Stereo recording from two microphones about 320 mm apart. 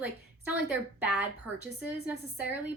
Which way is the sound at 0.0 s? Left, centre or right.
Centre.